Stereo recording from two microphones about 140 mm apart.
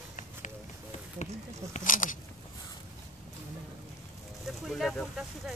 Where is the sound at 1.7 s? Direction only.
70° left (ahead or behind).